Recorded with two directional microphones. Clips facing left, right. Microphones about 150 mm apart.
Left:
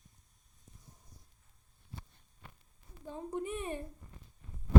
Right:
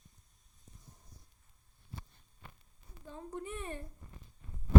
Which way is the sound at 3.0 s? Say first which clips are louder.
Left 5 dB; 20° left (ahead or behind).